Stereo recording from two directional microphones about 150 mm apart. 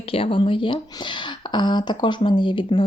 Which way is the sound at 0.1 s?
35° left (ahead or behind).